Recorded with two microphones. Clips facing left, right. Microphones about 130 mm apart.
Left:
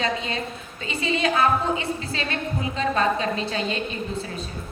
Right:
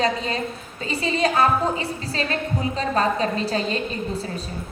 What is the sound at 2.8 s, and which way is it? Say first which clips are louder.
A woman's voice: even; 40° right (ahead or behind).